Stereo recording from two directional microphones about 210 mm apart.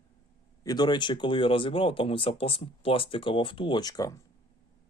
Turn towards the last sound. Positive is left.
turn(degrees=15)  # may be behind; listen again after turning